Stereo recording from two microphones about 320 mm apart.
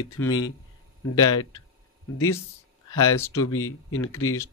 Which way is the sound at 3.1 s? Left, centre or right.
Centre.